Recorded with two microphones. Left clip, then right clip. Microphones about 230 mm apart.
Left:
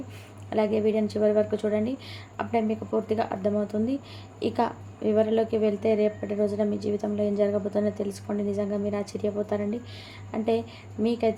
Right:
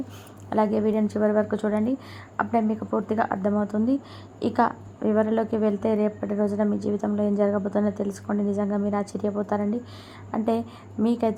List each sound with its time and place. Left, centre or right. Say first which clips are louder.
0.5 s a woman's voice: right 1 dB; centre